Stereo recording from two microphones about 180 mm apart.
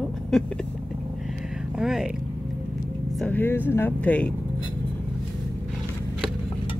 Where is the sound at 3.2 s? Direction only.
10° left (ahead or behind).